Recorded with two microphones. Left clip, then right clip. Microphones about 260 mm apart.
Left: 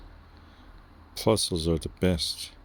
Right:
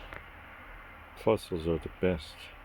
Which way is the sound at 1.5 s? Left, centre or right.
Left.